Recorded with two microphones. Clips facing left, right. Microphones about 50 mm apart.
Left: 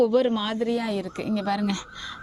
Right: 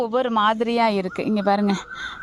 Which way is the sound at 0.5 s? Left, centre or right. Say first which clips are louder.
Right 6 dB; right.